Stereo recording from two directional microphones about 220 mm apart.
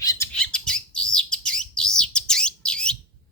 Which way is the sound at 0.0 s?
15° left (ahead or behind).